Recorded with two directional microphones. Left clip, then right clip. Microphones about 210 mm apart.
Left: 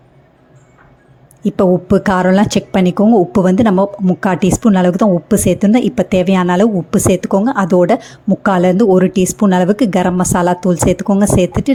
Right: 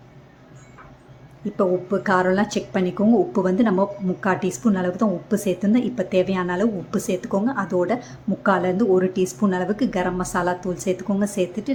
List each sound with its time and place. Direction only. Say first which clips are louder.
1.5 s a woman's voice: left 9 dB; 40° left (ahead or behind)